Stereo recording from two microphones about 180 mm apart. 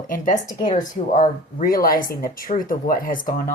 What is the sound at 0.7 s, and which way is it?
Speech, 40° left (ahead or behind).